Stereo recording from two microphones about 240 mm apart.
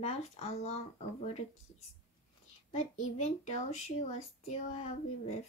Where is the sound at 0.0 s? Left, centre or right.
Left.